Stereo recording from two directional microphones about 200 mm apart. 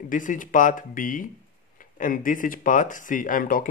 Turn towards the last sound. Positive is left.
turn(degrees=45)  # may be behind; listen again after turning